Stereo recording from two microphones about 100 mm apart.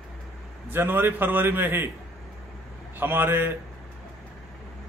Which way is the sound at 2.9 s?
20° right (ahead or behind).